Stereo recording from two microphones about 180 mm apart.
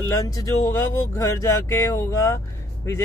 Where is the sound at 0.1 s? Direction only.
20° left (ahead or behind).